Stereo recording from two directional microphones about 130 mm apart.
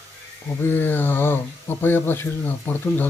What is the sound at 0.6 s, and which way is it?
Speech, 15° left (ahead or behind).